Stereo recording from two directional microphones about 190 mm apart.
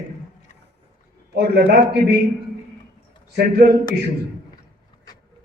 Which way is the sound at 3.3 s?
55° right (ahead or behind).